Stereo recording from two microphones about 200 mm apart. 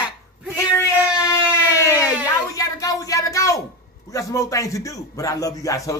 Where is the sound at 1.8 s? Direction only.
15° left (ahead or behind).